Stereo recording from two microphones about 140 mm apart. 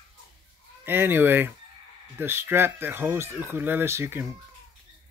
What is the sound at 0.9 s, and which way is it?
Speech, 15° right (ahead or behind).